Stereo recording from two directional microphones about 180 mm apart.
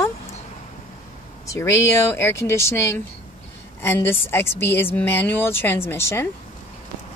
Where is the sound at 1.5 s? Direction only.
15° left (ahead or behind).